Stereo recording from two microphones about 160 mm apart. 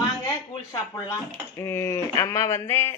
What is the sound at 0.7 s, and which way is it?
Speech, 20° left (ahead or behind).